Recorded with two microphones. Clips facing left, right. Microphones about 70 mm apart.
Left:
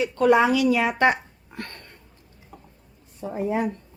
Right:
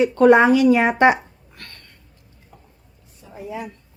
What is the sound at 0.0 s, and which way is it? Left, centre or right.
Speech, right.